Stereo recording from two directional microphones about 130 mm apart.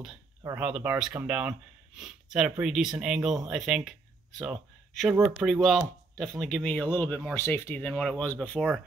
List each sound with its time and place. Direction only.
0.6 s speech: 10° right (ahead or behind); by 7.9 s 15° left (ahead or behind)
7.9 s speech: 5° left (ahead or behind)